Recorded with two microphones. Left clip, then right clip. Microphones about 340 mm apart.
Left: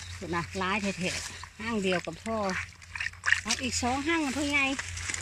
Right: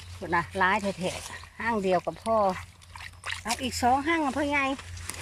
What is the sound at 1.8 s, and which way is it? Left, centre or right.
Speech, right.